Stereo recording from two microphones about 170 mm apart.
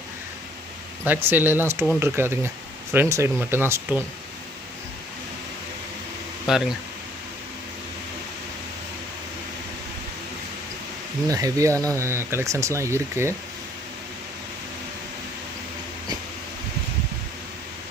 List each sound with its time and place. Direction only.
1.0 s speech: 10° right (ahead or behind)
6.5 s speech: 5° right (ahead or behind)
11.3 s speech: 20° right (ahead or behind)